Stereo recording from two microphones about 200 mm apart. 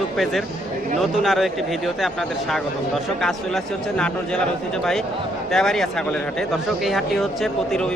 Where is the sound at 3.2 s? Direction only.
Centre (ahead or behind).